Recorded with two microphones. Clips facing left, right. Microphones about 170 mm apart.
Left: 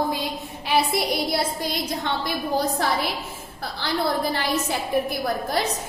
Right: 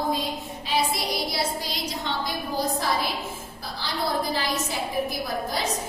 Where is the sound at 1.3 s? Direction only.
50° left (ahead or behind).